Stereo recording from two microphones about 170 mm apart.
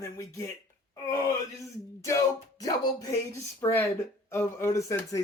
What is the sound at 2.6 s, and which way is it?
Speech, 20° left (ahead or behind).